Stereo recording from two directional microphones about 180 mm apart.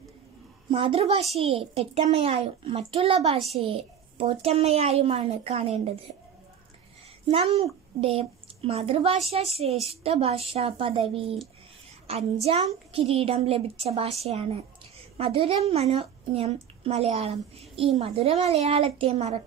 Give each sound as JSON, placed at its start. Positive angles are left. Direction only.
{"t": 0.7, "sound": "a woman's voice", "side_deg": -30}
{"t": 7.2, "sound": "a woman's voice", "side_deg": -35}